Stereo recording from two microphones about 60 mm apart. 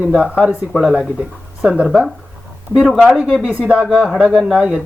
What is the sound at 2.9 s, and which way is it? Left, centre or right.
Speech, centre.